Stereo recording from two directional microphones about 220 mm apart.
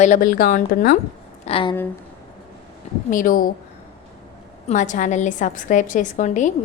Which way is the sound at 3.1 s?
40° left (ahead or behind).